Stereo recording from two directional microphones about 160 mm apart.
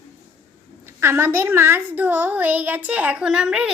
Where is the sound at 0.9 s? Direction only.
15° right (ahead or behind).